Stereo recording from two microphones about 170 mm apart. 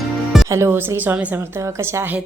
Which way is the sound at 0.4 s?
15° right (ahead or behind).